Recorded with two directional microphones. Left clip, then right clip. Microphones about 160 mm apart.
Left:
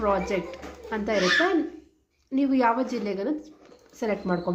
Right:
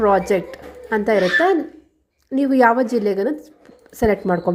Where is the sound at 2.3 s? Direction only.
45° right (ahead or behind).